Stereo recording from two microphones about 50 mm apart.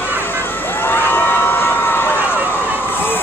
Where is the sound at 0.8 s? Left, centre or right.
Left.